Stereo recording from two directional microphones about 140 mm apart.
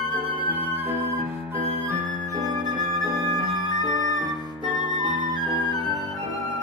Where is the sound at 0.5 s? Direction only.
15° right (ahead or behind).